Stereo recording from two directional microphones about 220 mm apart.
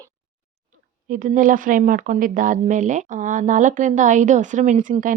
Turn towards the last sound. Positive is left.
turn(degrees=-35)  # may be behind; listen again after turning